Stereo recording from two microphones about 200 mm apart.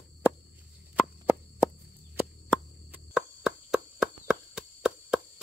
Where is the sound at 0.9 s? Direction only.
5° right (ahead or behind).